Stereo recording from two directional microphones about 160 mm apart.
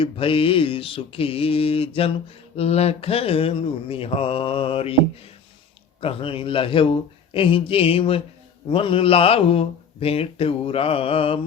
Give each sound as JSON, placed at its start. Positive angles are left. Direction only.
{"t": 0.0, "sound": "speech", "side_deg": 35}
{"t": 6.0, "sound": "speech", "side_deg": 35}